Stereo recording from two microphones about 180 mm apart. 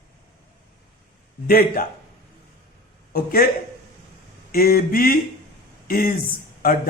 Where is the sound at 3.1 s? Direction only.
55° left (ahead or behind).